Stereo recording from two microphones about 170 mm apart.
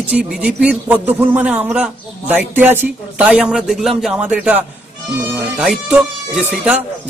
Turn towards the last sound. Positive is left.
turn(degrees=-10)  # may be behind; listen again after turning